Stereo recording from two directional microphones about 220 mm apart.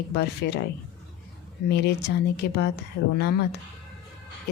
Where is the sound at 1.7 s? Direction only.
50° left (ahead or behind).